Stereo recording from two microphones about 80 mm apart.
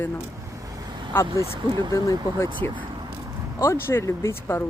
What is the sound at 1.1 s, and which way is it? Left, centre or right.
Speech, left.